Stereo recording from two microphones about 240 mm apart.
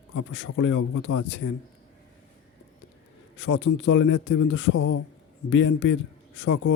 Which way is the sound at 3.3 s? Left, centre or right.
Left.